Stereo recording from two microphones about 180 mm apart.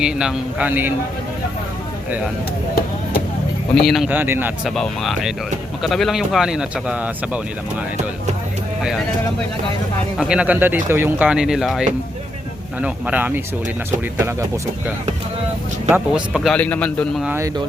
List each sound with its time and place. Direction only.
0.0 s speech: 5° right (ahead or behind)
2.0 s speech: 10° right (ahead or behind)
3.8 s speech: centre (ahead or behind)
4.7 s speech: centre (ahead or behind)
10.2 s speech: 5° right (ahead or behind)
15.9 s speech: 5° right (ahead or behind)
16.6 s speech: 10° left (ahead or behind)
17.2 s speech: 15° right (ahead or behind)